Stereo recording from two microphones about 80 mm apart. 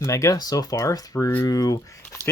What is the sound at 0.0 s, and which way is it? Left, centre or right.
Speech, left.